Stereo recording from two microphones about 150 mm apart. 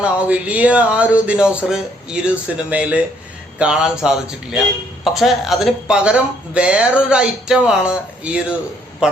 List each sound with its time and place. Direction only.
0.0 s speech: 10° right (ahead or behind)